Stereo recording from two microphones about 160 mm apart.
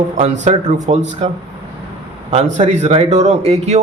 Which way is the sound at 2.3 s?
45° right (ahead or behind).